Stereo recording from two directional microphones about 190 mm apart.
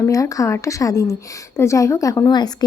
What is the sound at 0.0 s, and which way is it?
Speech, 15° left (ahead or behind).